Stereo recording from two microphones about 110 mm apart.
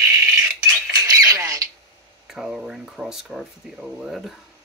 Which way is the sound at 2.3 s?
5° right (ahead or behind).